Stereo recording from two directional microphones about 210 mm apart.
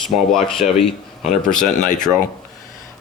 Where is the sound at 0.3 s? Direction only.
Centre (ahead or behind).